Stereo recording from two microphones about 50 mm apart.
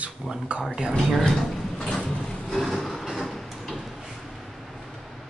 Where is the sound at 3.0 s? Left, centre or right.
Centre.